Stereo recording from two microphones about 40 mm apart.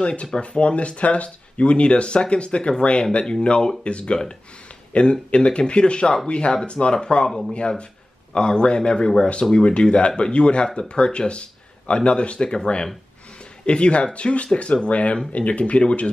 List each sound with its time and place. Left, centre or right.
0.0 s speech: left